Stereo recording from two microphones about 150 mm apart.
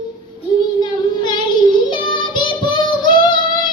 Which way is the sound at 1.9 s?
35° left (ahead or behind).